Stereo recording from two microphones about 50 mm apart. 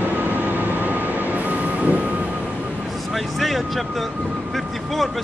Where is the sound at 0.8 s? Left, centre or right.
Right.